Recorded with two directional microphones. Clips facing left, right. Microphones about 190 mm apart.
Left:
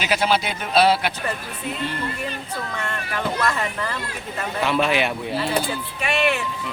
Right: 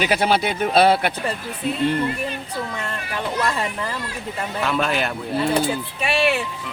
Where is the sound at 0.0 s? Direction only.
50° right (ahead or behind).